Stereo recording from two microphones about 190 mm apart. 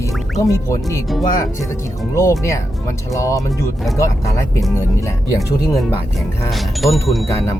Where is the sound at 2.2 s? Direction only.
15° left (ahead or behind).